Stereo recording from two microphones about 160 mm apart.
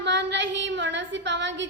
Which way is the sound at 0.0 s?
90° right.